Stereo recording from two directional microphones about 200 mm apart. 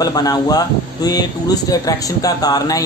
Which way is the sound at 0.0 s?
20° left (ahead or behind).